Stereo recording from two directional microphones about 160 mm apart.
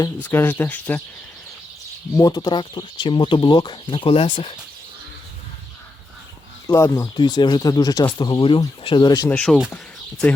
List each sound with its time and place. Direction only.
0.2 s speech: 10° left (ahead or behind)
2.1 s speech: 25° left (ahead or behind)
6.7 s speech: 20° left (ahead or behind)
9.3 s speech: centre (ahead or behind)